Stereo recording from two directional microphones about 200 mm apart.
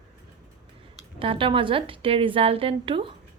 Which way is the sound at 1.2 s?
25° right (ahead or behind).